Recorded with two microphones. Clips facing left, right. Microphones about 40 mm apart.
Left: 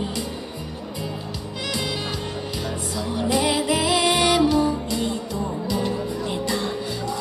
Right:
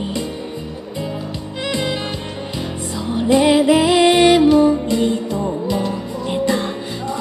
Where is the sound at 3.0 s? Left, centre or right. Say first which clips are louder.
Right 8 dB; right.